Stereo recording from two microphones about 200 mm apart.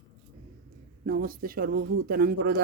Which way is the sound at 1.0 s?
45° right (ahead or behind).